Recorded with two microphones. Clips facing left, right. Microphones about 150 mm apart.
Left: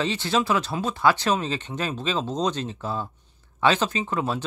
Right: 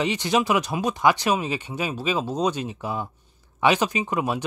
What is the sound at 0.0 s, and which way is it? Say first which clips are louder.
Speech: right 2 dB; 15° right (ahead or behind).